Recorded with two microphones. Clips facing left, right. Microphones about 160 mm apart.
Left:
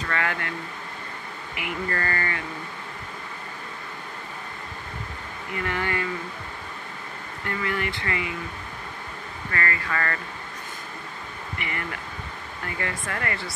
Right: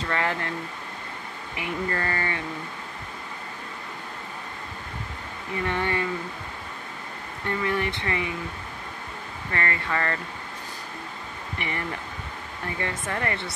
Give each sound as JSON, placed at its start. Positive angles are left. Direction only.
{"t": 0.0, "sound": "speech", "side_deg": -30}
{"t": 1.6, "sound": "speech", "side_deg": -25}
{"t": 5.6, "sound": "speech", "side_deg": -25}
{"t": 7.4, "sound": "speech", "side_deg": -25}
{"t": 9.5, "sound": "speech", "side_deg": -25}
{"t": 11.5, "sound": "speech", "side_deg": -25}